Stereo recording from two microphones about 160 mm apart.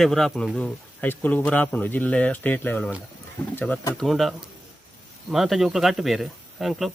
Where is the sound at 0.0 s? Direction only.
Centre (ahead or behind).